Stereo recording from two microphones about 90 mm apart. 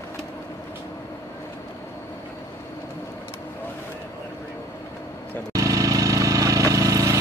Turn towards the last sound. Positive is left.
turn(degrees=-40)  # may be behind; listen again after turning